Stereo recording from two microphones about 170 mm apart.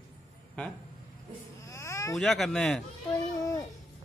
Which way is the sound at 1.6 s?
20° left (ahead or behind).